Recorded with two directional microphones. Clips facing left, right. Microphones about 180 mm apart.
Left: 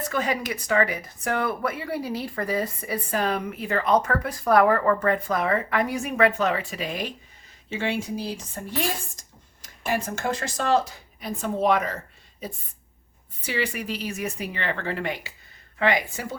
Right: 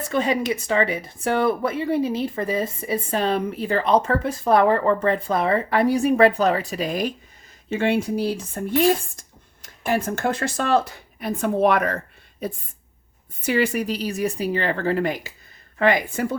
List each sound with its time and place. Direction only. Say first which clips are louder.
0.1 s speech: right 7 dB; 25° right (ahead or behind); by 7.1 s 40° right (ahead or behind)
7.7 s speech: right 6 dB; 55° right (ahead or behind)
13.4 s speech: right 7 dB; 45° right (ahead or behind)